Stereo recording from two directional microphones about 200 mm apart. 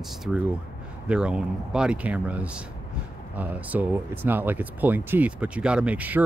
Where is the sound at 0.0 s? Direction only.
Centre (ahead or behind).